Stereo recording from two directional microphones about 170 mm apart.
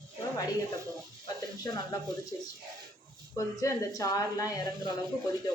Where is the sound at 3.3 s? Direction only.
20° left (ahead or behind).